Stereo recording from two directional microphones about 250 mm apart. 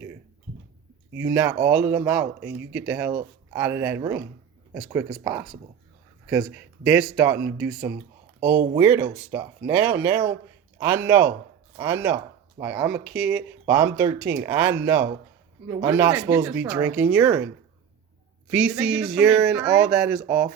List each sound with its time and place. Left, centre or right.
1.1 s speech: centre
2.2 s speech: right
2.6 s speech: centre
18.5 s speech: centre